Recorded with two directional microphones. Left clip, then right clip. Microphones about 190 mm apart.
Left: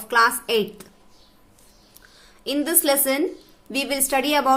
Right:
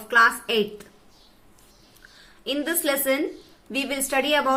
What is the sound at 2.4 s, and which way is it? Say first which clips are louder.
A woman's voice: left 2 dB; 45° left (ahead or behind).